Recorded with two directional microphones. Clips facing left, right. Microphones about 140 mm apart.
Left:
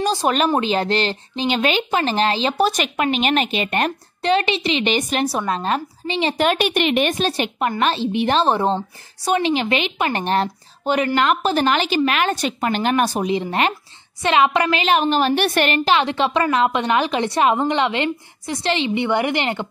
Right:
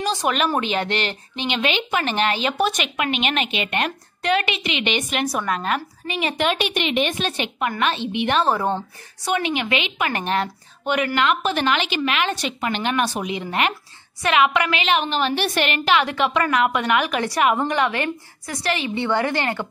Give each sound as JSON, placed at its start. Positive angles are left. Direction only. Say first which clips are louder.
{"t": 0.0, "sound": "a woman's voice", "louder": "left 3 dB", "side_deg": 35}
{"t": 6.4, "sound": "a woman's voice", "louder": "left 4 dB", "side_deg": 45}
{"t": 7.2, "sound": "a woman's voice", "louder": "left 4 dB", "side_deg": 40}
{"t": 15.7, "sound": "a woman's voice", "louder": "left 2 dB", "side_deg": 30}